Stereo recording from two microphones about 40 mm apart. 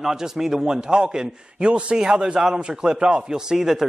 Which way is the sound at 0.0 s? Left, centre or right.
Centre.